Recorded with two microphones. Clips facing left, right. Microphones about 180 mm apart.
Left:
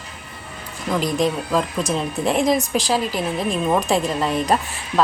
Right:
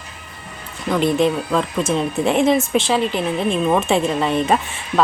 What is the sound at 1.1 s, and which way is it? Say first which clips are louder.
Speech: right 2 dB; centre (ahead or behind).